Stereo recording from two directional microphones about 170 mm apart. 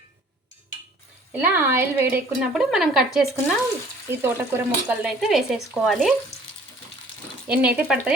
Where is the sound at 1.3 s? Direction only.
10° right (ahead or behind).